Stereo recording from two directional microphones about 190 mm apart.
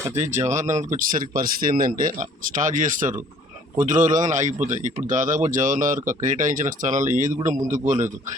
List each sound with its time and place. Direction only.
0.1 s a man's voice: 40° right (ahead or behind)